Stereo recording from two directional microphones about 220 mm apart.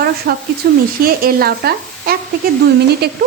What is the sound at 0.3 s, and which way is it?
A woman's voice, 45° right (ahead or behind).